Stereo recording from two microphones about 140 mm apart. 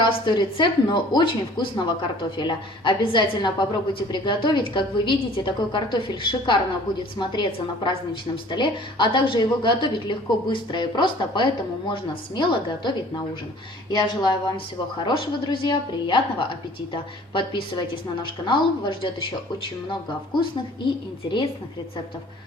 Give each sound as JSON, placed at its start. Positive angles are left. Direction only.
{"t": 0.0, "sound": "a woman's voice", "side_deg": 35}